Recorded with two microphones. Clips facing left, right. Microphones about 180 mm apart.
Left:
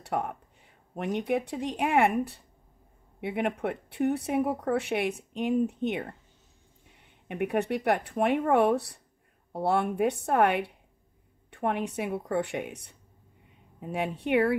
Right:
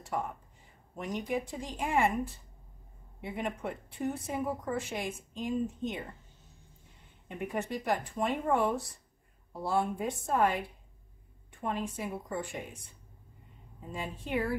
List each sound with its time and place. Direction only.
0.0 s speech: 65° left (ahead or behind)
7.2 s speech: 65° left (ahead or behind)